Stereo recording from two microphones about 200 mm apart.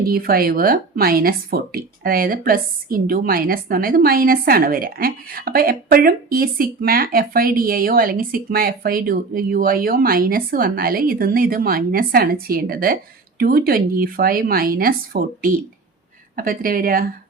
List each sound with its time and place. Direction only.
0.0 s a woman's voice: 50° right (ahead or behind)